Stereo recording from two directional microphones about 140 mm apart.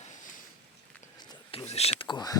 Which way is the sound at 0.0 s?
65° left (ahead or behind).